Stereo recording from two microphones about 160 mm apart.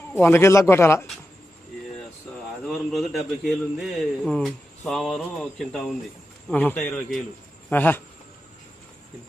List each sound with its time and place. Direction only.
0.1 s a man's voice: 15° left (ahead or behind)
2.6 s a man's voice: centre (ahead or behind)